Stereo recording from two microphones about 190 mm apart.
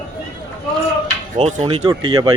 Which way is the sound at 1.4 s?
30° right (ahead or behind).